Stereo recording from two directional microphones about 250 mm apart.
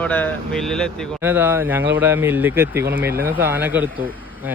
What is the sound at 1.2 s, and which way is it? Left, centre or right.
Speech, centre.